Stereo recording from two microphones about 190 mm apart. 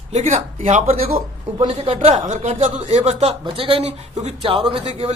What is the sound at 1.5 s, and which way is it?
Speech, 30° right (ahead or behind).